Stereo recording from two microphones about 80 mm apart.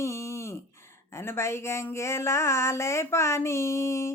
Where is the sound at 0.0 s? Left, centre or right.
Left.